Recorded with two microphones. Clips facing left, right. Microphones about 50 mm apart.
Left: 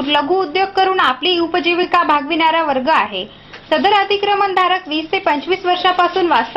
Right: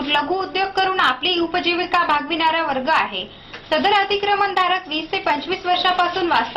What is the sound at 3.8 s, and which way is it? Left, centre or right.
A woman's voice, left.